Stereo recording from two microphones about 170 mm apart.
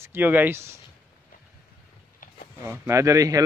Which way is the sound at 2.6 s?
15° right (ahead or behind).